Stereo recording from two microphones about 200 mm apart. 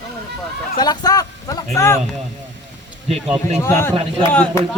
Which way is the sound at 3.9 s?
30° right (ahead or behind).